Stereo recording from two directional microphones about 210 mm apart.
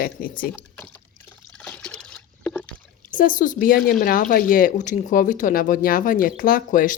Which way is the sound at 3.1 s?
40° left (ahead or behind).